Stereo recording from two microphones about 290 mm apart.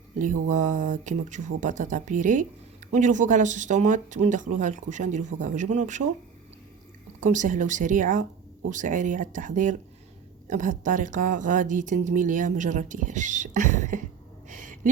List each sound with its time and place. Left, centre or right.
0.4 s a woman's voice: right
7.2 s a woman's voice: right
14.4 s a sound: right